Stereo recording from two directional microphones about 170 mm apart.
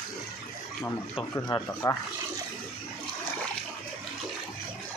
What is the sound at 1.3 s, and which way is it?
Speech, 15° left (ahead or behind).